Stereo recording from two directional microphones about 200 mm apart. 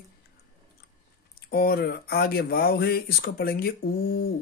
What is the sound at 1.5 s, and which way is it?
Speech, 50° left (ahead or behind).